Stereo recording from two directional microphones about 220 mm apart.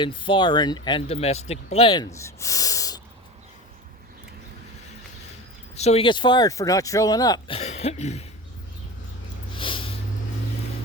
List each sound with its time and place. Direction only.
0.0 s speech: 20° left (ahead or behind)
5.7 s speech: 30° left (ahead or behind)
9.6 s snort: 25° left (ahead or behind)